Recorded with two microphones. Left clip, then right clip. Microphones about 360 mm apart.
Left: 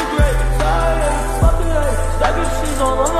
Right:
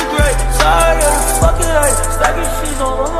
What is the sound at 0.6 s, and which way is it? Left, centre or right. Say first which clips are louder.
Music: right 8 dB; right.